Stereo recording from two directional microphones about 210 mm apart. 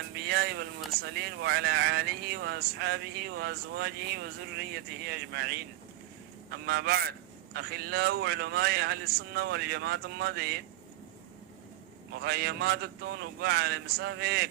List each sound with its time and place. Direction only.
0.3 s a sound: 50° right (ahead or behind)
1.1 s speech: 50° right (ahead or behind)
6.7 s speech: 50° right (ahead or behind)
12.2 s speech: 50° right (ahead or behind)